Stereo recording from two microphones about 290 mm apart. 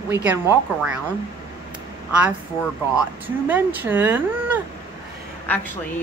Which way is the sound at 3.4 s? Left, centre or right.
Centre.